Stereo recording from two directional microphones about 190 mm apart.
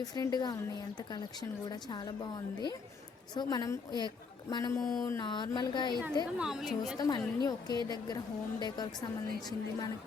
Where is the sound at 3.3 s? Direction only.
20° left (ahead or behind).